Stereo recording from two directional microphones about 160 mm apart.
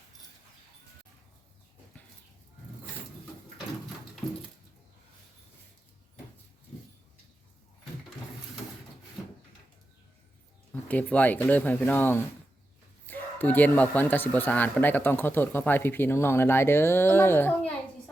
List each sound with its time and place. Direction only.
10.7 s speech: 10° left (ahead or behind)